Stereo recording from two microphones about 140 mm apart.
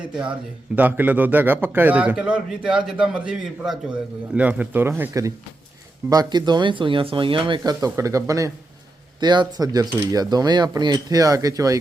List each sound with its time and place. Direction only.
0.0 s a man's voice: 5° right (ahead or behind); by 11.8 s 25° right (ahead or behind)